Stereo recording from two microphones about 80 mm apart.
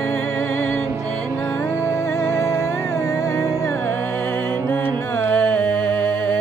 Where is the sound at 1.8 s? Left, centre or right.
Left.